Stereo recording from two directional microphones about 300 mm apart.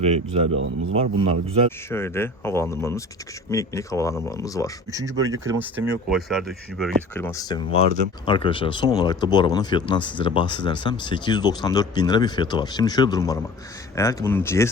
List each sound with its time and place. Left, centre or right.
0.5 s speech: right
0.9 s a man's voice: centre
1.9 s speech: centre
4.9 s speech: centre